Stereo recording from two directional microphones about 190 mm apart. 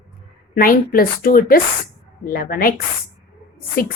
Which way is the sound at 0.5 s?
50° left (ahead or behind).